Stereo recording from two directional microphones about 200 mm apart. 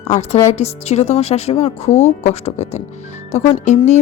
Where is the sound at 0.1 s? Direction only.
35° left (ahead or behind).